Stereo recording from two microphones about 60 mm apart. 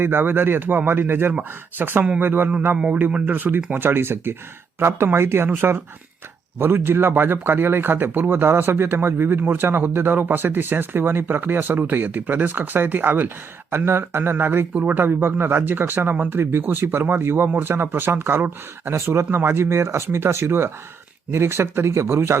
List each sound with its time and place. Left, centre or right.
0.0 s speech: right
2.7 s a man's voice: centre
3.2 s speech: right
14.7 s speech: right
14.9 s speech: right